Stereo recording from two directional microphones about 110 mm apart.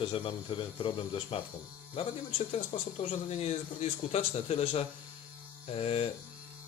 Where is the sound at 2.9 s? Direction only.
90° left; by 6.1 s 65° left (ahead or behind).